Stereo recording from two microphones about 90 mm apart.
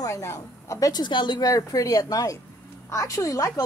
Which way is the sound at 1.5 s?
40° left (ahead or behind).